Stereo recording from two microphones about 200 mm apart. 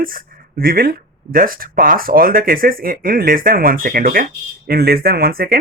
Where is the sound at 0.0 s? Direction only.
45° right (ahead or behind).